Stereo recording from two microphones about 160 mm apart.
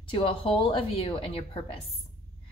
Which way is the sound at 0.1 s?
35° left (ahead or behind).